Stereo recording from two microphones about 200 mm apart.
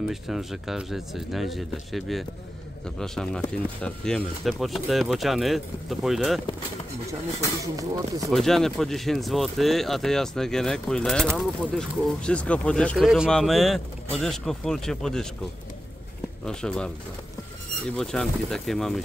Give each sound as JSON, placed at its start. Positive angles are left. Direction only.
{"t": 0.1, "sound": "speech", "side_deg": 0}
{"t": 7.6, "sound": "speech", "side_deg": -15}
{"t": 8.3, "sound": "speech", "side_deg": 0}
{"t": 16.4, "sound": "speech", "side_deg": 5}
{"t": 17.9, "sound": "speech", "side_deg": 5}